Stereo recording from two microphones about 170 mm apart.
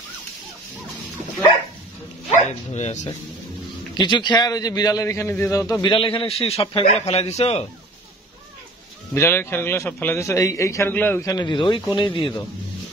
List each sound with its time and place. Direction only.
2.3 s speech: 45° left (ahead or behind)
3.9 s a man's voice: 25° left (ahead or behind)
9.1 s a man's voice: 15° left (ahead or behind)